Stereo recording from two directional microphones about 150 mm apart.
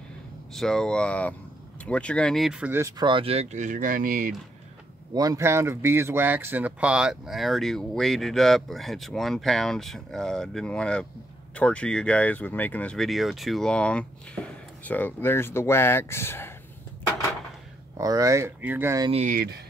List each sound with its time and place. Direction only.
0.5 s speech: 5° left (ahead or behind); by 2.9 s 10° right (ahead or behind)
3.0 s speech: 35° right (ahead or behind); by 4.4 s 60° right (ahead or behind)
5.1 s speech: 25° right (ahead or behind); by 16.5 s 15° left (ahead or behind)
17.9 s speech: 25° right (ahead or behind)
19.1 s speech: 65° right (ahead or behind)